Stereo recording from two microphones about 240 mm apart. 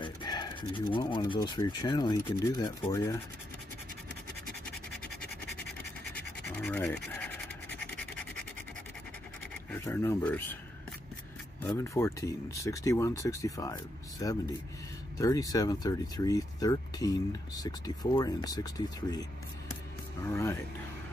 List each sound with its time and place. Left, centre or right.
0.0 s speech: centre
6.5 s speech: centre
9.5 s speech: centre
11.6 s speech: centre
20.2 s speech: centre